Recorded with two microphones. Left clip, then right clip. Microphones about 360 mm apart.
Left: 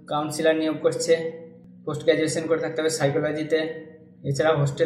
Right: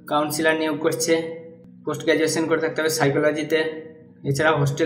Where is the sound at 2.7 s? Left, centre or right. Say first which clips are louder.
Right 3 dB; right.